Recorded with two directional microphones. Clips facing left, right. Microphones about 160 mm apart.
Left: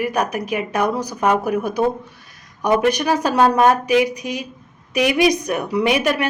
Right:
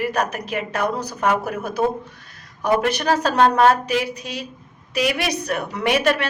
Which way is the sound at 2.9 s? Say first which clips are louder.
Left 2 dB; 15° left (ahead or behind).